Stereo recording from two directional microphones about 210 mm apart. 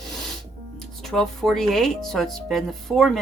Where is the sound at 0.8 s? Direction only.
Centre (ahead or behind).